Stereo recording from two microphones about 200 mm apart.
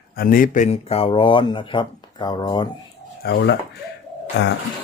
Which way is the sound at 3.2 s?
50° left (ahead or behind).